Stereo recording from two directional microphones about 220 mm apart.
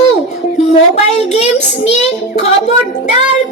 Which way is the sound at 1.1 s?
30° left (ahead or behind).